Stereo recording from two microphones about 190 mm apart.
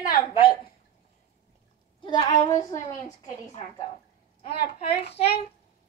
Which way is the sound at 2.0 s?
25° left (ahead or behind).